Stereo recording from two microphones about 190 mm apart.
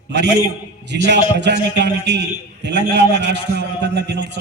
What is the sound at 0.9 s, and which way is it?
A man's voice, 65° right (ahead or behind).